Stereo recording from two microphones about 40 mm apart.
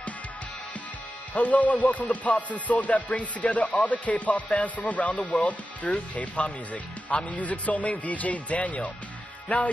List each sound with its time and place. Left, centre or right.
1.3 s speech: left